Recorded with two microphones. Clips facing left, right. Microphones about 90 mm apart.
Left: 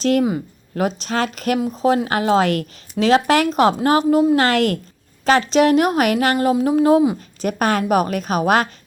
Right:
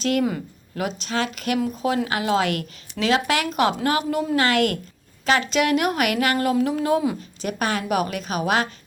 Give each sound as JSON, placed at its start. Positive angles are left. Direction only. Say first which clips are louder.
{"t": 0.0, "sound": "a woman's voice", "louder": "left 5 dB", "side_deg": 35}
{"t": 6.3, "sound": "speech", "louder": "left 5 dB", "side_deg": 20}
{"t": 7.2, "sound": "a woman's voice", "louder": "left 5 dB", "side_deg": 45}